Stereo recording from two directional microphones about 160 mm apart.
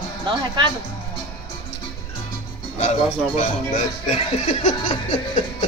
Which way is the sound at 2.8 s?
45° left (ahead or behind).